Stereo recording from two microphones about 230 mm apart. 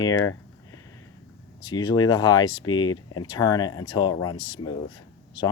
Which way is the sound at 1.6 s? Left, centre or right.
Centre.